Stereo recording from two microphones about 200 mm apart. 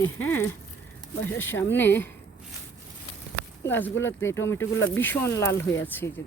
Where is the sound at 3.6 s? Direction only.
10° left (ahead or behind).